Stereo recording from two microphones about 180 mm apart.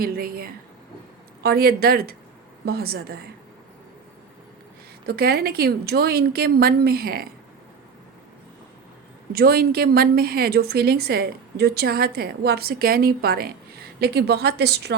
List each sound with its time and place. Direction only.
0.0 s a woman's voice: 55° right (ahead or behind)
5.0 s a woman's voice: 60° right (ahead or behind)
9.3 s a woman's voice: 60° right (ahead or behind)